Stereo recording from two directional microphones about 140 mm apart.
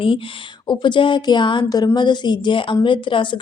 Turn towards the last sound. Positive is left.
turn(degrees=35)  # may be behind; listen again after turning